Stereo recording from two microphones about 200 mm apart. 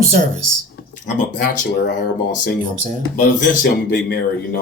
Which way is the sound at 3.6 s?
50° left (ahead or behind).